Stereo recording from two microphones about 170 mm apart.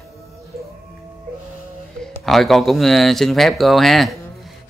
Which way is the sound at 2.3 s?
Centre (ahead or behind).